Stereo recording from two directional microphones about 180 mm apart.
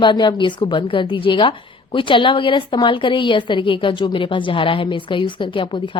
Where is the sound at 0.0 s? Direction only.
25° left (ahead or behind).